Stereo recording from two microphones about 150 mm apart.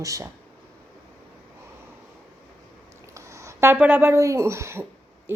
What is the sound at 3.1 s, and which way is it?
A woman's voice, 20° right (ahead or behind).